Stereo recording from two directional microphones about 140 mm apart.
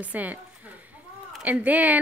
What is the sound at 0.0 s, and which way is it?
Speech, 10° right (ahead or behind).